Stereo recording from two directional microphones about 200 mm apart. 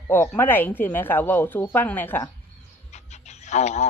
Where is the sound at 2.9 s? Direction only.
35° left (ahead or behind).